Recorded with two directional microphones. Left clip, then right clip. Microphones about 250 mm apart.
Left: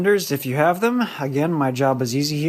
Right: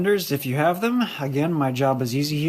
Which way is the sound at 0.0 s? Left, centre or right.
Centre.